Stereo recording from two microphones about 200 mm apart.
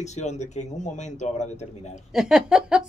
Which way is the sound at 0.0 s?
35° left (ahead or behind).